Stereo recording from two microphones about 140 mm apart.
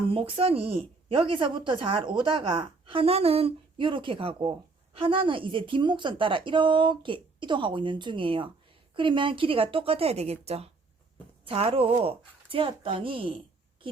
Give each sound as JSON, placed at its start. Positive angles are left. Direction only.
{"t": 0.1, "sound": "speech", "side_deg": -40}